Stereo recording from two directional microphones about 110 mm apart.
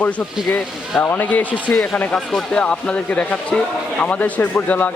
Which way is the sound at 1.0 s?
15° left (ahead or behind).